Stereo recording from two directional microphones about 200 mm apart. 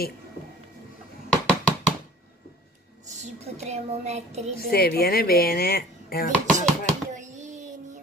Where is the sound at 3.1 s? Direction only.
35° right (ahead or behind).